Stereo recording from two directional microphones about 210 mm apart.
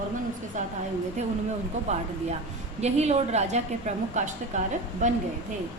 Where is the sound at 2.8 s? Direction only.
30° right (ahead or behind).